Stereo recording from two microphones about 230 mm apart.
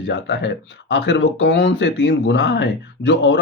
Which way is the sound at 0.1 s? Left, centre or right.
Left.